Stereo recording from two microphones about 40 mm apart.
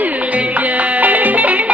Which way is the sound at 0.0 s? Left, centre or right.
Right.